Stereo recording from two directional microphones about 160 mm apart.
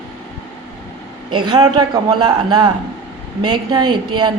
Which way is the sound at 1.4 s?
25° right (ahead or behind).